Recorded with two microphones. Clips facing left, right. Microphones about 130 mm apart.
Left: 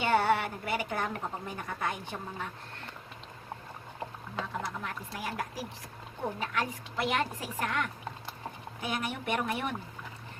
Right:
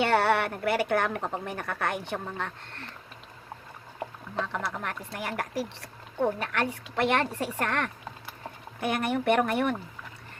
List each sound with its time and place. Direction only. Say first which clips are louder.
0.0 s speech: right 3 dB; 65° right (ahead or behind)
4.4 s speech: right 4 dB; 65° right (ahead or behind)